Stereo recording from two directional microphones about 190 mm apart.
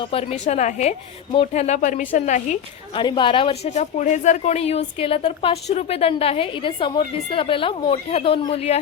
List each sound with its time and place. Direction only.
0.0 s speech: 30° left (ahead or behind)
2.9 s a woman's voice: 25° left (ahead or behind)